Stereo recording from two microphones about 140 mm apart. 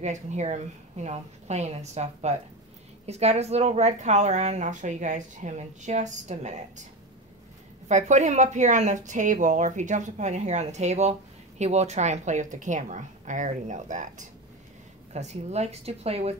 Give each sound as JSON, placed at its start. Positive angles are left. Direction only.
{"t": 0.0, "sound": "a woman's voice", "side_deg": -55}
{"t": 7.9, "sound": "speech", "side_deg": -60}
{"t": 15.1, "sound": "a woman's voice", "side_deg": -55}